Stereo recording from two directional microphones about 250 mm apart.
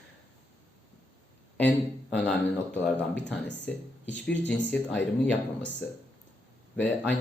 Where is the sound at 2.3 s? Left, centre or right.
Centre.